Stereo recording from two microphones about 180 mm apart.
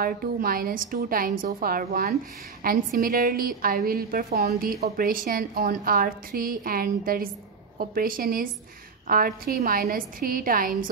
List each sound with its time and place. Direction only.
0.0 s a woman's voice: 55° right (ahead or behind)